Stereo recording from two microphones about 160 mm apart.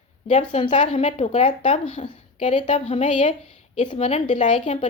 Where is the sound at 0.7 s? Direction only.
45° left (ahead or behind).